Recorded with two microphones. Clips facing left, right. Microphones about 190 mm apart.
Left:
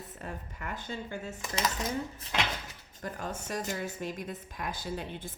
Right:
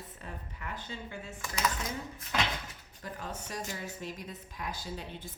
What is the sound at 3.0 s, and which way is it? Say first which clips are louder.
A woman's voice: left 3 dB; 50° left (ahead or behind).